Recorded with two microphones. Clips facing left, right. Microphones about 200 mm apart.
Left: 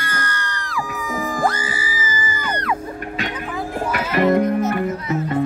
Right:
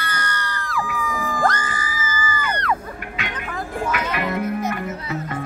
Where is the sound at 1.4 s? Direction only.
10° left (ahead or behind).